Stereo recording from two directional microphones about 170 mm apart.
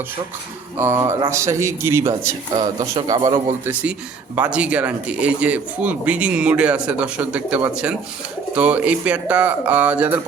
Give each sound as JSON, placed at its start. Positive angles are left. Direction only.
{"t": 0.8, "sound": "a man's voice", "side_deg": -15}
{"t": 4.4, "sound": "speech", "side_deg": -5}